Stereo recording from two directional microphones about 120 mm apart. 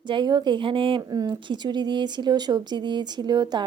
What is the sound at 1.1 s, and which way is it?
Speech, 35° right (ahead or behind).